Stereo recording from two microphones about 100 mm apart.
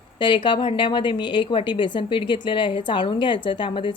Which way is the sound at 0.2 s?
55° left (ahead or behind).